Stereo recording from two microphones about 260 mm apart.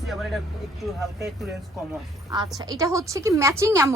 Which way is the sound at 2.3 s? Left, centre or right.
Centre.